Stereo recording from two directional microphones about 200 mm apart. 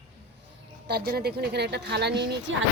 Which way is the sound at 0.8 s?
55° right (ahead or behind).